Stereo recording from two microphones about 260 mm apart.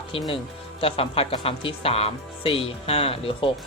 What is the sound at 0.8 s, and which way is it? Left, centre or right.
Speech, left.